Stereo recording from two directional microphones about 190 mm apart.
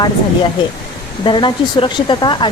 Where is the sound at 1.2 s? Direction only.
25° left (ahead or behind).